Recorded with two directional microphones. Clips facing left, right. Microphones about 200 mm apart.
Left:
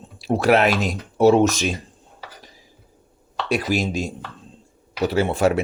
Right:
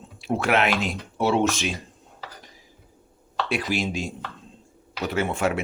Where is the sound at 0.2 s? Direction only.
40° left (ahead or behind).